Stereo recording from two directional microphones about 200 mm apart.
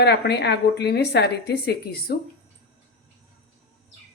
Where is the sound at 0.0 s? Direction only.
55° left (ahead or behind).